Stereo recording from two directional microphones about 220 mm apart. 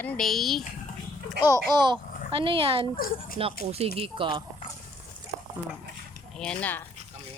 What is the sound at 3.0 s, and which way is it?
Speech, 40° left (ahead or behind).